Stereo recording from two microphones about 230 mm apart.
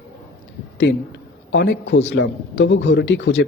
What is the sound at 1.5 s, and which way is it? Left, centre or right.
A man's voice, left.